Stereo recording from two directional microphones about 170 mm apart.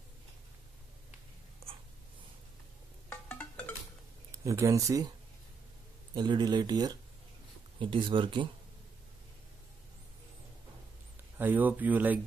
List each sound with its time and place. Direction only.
3.1 s music: 10° left (ahead or behind)
4.3 s speech: 20° right (ahead or behind)
6.1 s speech: 25° right (ahead or behind)
11.3 s speech: 10° right (ahead or behind)